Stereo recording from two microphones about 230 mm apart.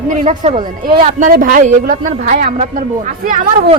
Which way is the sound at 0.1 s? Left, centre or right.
Right.